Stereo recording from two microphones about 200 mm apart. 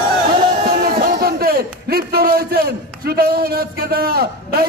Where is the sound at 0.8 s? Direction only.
50° right (ahead or behind).